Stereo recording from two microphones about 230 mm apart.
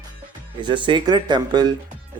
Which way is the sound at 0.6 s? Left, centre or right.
Right.